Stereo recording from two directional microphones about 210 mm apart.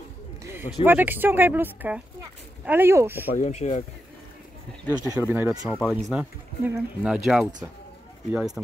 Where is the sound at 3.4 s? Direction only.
35° left (ahead or behind).